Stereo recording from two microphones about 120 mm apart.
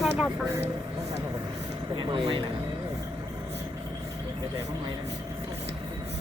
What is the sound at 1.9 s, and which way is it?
Speech, 45° right (ahead or behind).